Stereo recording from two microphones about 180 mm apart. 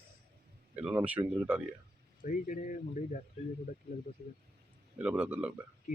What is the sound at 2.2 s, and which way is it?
Speech, 45° left (ahead or behind).